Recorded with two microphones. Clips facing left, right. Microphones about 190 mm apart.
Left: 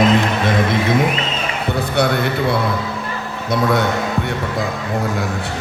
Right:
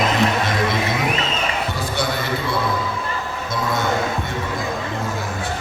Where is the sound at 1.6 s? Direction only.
60° left (ahead or behind).